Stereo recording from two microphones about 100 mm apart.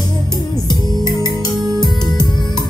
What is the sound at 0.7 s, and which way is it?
Music, 40° left (ahead or behind).